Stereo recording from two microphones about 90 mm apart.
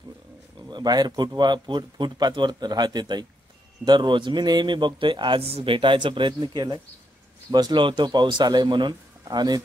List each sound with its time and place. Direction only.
0.6 s a man's voice: 55° right (ahead or behind)